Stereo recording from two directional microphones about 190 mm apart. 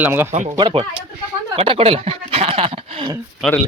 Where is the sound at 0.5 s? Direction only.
25° right (ahead or behind).